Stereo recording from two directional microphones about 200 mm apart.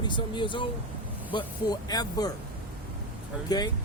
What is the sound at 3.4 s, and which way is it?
Speech, 20° left (ahead or behind).